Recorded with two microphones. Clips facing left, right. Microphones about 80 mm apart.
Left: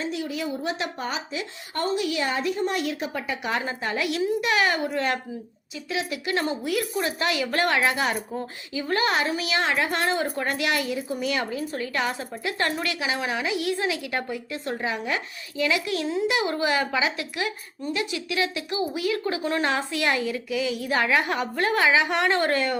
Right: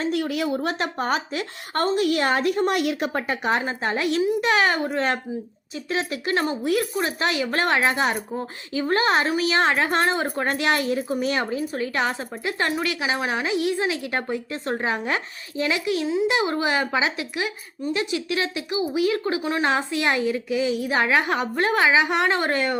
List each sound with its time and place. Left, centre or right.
0.0 s a woman's voice: right
0.6 s a woman's voice: right
3.1 s a woman's voice: right
3.5 s a woman's voice: right